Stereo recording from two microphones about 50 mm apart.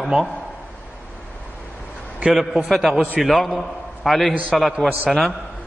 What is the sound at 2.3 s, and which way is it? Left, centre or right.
A man's voice, centre.